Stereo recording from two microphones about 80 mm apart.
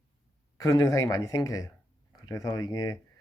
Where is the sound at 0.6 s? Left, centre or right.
Left.